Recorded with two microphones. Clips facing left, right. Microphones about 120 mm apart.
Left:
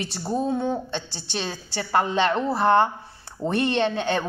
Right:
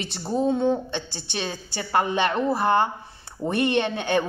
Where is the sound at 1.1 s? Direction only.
55° right (ahead or behind).